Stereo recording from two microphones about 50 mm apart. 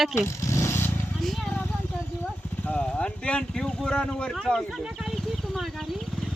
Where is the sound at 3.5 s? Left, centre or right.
Centre.